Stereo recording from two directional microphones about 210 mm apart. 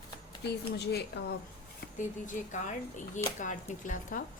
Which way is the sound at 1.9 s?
35° left (ahead or behind).